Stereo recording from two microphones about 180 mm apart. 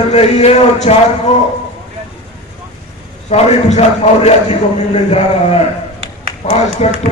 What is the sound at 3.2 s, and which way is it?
A man's voice, 40° left (ahead or behind).